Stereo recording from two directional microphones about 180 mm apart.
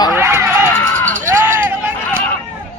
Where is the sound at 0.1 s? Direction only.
15° right (ahead or behind).